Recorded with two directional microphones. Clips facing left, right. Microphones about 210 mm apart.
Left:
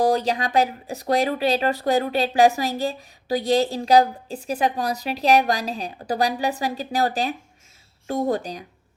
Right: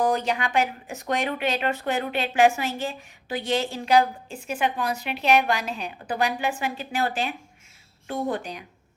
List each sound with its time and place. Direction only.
0.0 s speech: 35° left (ahead or behind)